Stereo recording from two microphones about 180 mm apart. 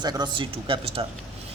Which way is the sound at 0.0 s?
25° right (ahead or behind).